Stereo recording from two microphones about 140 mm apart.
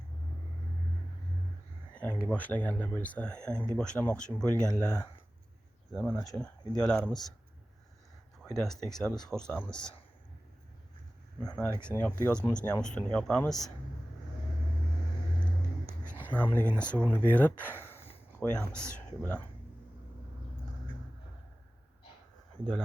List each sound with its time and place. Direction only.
2.2 s speech: 10° left (ahead or behind)
8.4 s speech: 5° left (ahead or behind)
11.3 s speech: 5° left (ahead or behind)
16.2 s a sound: 10° left (ahead or behind)
16.5 s speech: 15° right (ahead or behind)
16.7 s speech: 10° left (ahead or behind)